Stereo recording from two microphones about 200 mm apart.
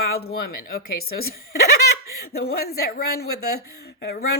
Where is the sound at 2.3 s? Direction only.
50° left (ahead or behind).